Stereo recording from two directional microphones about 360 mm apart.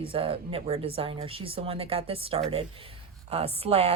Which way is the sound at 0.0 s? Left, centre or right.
Centre.